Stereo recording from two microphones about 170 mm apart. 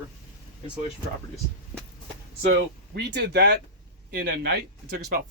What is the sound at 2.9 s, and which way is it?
Speech, 75° right (ahead or behind).